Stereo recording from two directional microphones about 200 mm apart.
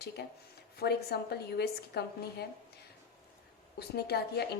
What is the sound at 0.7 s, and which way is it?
A woman's voice, 50° left (ahead or behind).